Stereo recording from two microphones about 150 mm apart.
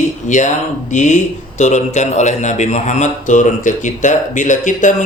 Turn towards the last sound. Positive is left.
turn(degrees=55)  # may be behind; listen again after turning